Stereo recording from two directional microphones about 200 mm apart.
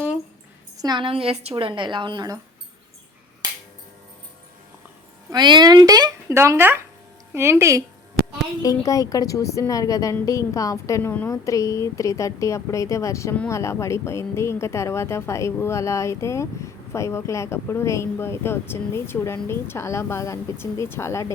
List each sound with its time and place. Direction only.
0.8 s a woman's voice: 20° right (ahead or behind)
3.4 s finger snapping: 20° right (ahead or behind)
5.3 s speech: 20° right (ahead or behind)
8.2 s a sound: 50° right (ahead or behind)
8.6 s a woman's voice: 15° left (ahead or behind)